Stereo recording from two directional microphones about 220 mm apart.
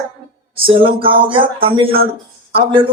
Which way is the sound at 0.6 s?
25° right (ahead or behind).